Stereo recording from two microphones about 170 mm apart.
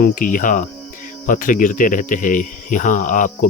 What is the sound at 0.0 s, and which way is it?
Speech, 55° left (ahead or behind).